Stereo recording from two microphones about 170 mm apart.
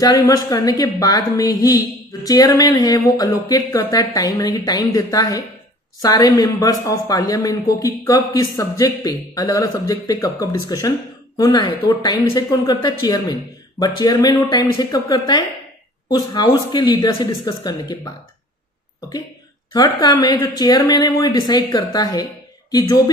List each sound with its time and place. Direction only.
0.0 s a woman's voice: 20° left (ahead or behind)
19.7 s a woman's voice: 25° left (ahead or behind)